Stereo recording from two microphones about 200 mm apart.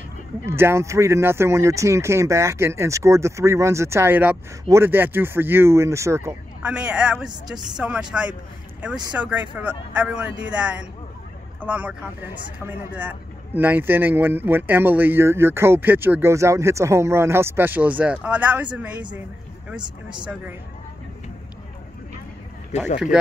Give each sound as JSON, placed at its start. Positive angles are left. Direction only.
{"t": 0.5, "sound": "speech", "side_deg": -10}
{"t": 19.8, "sound": "speech", "side_deg": -20}
{"t": 22.7, "sound": "speech", "side_deg": 35}